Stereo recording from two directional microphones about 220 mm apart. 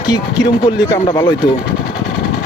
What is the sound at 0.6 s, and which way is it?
Speech, 20° left (ahead or behind).